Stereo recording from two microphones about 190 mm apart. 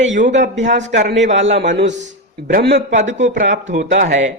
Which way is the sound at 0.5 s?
70° right (ahead or behind).